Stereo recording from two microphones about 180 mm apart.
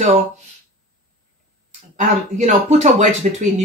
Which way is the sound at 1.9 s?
40° right (ahead or behind).